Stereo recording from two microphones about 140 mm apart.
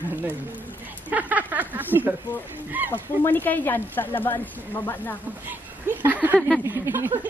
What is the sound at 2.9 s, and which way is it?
Speech, 15° left (ahead or behind).